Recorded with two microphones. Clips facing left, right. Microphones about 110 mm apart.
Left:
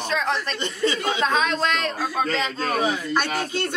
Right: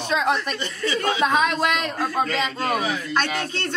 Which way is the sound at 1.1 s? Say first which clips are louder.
Right 2 dB; 15° right (ahead or behind).